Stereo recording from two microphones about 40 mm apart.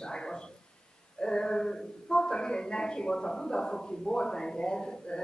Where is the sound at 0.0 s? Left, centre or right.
Left.